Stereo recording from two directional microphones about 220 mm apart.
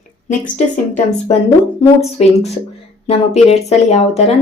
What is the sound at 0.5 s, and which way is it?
Speech, 35° left (ahead or behind).